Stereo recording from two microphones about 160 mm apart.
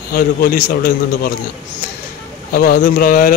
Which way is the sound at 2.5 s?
70° left (ahead or behind).